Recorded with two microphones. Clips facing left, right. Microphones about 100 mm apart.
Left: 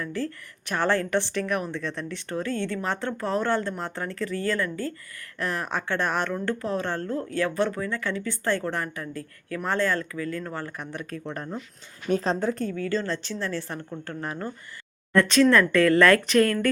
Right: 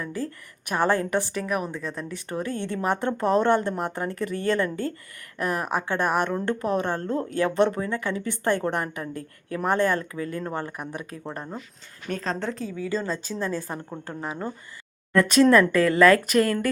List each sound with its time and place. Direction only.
0.0 s a woman's voice: 15° right (ahead or behind)
12.7 s speech: 10° right (ahead or behind)